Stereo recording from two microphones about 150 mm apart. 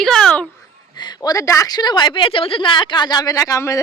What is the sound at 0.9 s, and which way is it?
Speech, 30° left (ahead or behind).